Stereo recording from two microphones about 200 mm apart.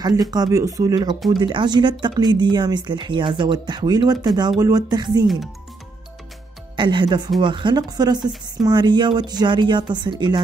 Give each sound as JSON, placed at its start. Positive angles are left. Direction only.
{"t": 0.0, "sound": "speech", "side_deg": -20}
{"t": 6.8, "sound": "speech", "side_deg": -25}